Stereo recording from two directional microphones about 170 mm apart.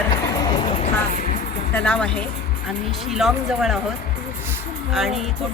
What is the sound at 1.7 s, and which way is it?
Speech, 10° left (ahead or behind).